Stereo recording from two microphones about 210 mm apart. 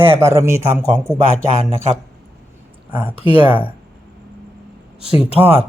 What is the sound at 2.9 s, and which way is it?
Speech, 10° right (ahead or behind).